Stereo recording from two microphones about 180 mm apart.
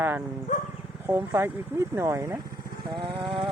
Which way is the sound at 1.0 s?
10° right (ahead or behind).